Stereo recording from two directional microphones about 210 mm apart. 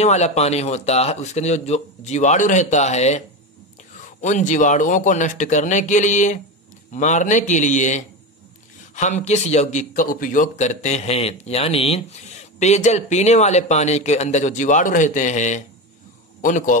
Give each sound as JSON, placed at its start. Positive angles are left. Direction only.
{"t": 0.0, "sound": "a man's voice", "side_deg": 35}